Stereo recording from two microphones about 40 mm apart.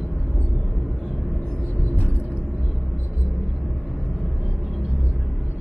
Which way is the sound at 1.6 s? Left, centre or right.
Left.